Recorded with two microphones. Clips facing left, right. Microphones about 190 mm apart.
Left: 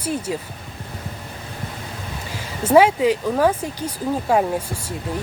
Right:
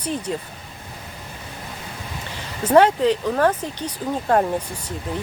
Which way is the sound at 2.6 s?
10° left (ahead or behind).